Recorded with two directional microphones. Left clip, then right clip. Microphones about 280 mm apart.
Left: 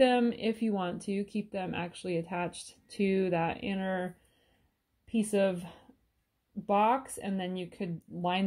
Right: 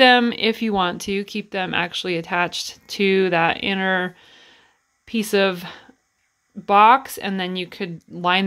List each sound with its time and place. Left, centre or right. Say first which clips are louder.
0.0 s speech: right 12 dB; right